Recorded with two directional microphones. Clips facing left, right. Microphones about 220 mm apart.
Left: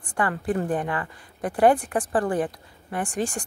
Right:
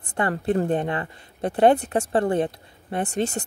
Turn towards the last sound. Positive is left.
turn(degrees=-25)  # may be behind; listen again after turning